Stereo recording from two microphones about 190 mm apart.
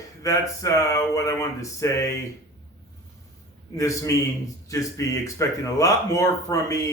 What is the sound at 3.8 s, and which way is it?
Speech, 15° left (ahead or behind).